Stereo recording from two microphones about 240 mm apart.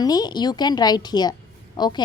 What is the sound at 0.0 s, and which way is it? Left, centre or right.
A woman's voice, centre.